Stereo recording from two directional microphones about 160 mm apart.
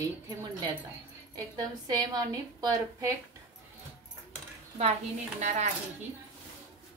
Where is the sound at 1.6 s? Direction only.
25° right (ahead or behind).